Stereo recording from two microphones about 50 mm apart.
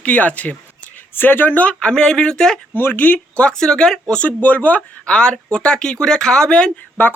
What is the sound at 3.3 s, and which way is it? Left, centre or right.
Speech, centre.